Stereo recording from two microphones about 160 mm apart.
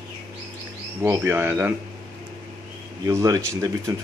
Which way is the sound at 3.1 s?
20° right (ahead or behind).